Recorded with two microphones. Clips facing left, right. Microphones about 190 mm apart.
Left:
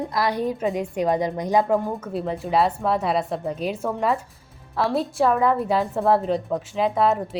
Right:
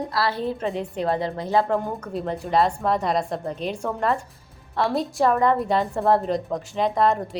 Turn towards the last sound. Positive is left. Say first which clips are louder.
# even
turn(degrees=5)  # may be behind; listen again after turning